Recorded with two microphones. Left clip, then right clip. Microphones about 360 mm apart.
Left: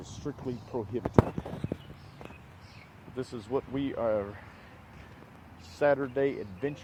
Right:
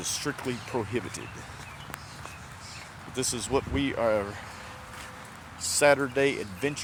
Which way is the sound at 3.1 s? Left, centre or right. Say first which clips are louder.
Right 5 dB; left.